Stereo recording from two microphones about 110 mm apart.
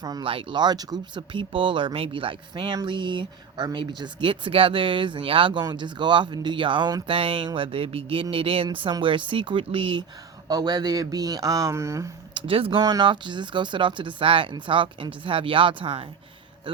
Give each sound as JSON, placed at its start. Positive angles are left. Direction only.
{"t": 0.0, "sound": "speech", "side_deg": -35}
{"t": 0.3, "sound": "speech", "side_deg": -50}
{"t": 7.2, "sound": "speech", "side_deg": -55}
{"t": 10.5, "sound": "speech", "side_deg": -40}
{"t": 12.3, "sound": "speech", "side_deg": -55}
{"t": 12.8, "sound": "speech", "side_deg": -40}